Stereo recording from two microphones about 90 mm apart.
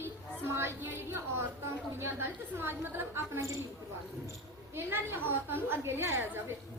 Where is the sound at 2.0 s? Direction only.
25° right (ahead or behind).